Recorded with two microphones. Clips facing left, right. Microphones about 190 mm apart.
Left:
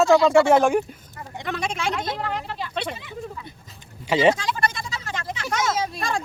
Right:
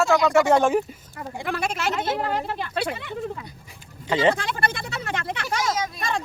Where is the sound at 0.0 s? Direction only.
20° left (ahead or behind).